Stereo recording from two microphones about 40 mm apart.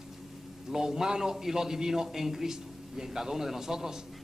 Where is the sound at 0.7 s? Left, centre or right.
Centre.